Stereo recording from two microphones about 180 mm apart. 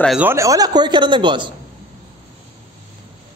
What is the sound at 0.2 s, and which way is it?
Speech, 15° right (ahead or behind).